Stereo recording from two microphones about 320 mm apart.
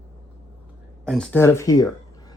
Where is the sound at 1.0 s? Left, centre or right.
Centre.